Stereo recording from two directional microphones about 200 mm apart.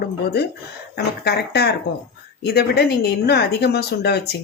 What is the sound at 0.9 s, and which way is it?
Speech, 55° left (ahead or behind).